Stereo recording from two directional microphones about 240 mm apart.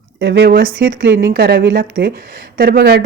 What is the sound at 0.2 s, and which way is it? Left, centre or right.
A woman's voice, right.